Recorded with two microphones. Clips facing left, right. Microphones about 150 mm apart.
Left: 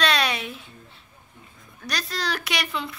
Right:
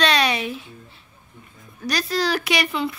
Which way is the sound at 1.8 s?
5° right (ahead or behind).